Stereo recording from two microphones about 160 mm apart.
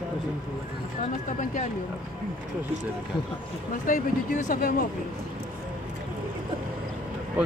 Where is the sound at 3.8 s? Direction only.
60° left (ahead or behind).